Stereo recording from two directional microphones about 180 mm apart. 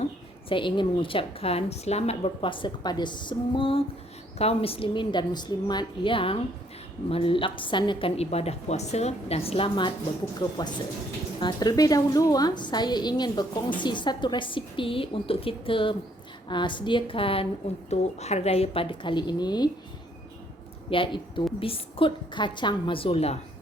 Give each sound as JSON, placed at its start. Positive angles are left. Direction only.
{"t": 0.0, "sound": "a woman's voice", "side_deg": 30}
{"t": 20.9, "sound": "a woman's voice", "side_deg": 30}